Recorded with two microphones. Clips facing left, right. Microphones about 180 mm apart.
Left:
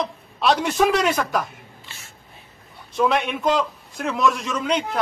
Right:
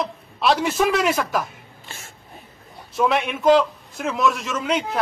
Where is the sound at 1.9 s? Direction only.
50° right (ahead or behind).